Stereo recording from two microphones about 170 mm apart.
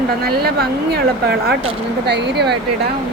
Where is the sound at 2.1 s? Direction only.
90° right.